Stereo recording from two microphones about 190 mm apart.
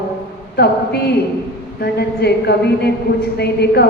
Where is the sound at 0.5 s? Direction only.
60° left (ahead or behind).